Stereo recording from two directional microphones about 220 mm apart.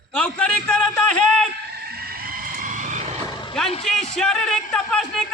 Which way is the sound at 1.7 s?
45° right (ahead or behind).